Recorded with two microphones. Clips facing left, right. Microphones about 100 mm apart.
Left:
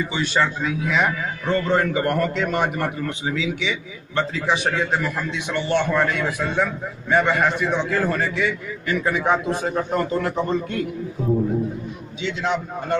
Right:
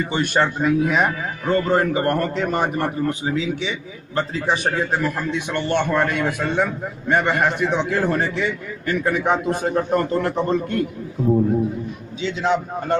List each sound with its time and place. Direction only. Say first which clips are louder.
0.0 s a man's voice: right 2 dB; 50° right (ahead or behind)
8.4 s a man's voice: even; 50° right (ahead or behind)